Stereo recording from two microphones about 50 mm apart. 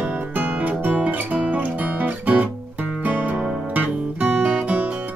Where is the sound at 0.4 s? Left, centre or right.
Right.